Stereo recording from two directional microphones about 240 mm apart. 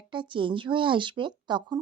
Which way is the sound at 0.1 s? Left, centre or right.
Right.